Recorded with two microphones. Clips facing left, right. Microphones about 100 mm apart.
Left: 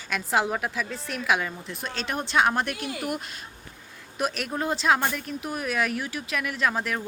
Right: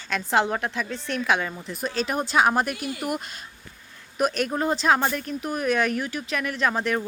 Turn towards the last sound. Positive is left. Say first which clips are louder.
# right 3 dB
turn(degrees=0)  # may be behind; listen again after turning